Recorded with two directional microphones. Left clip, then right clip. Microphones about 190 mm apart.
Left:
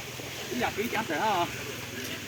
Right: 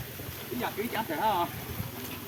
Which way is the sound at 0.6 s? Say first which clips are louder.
Left 3 dB; 5° left (ahead or behind).